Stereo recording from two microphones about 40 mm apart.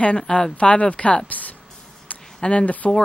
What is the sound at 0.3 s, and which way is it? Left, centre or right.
Speech, left.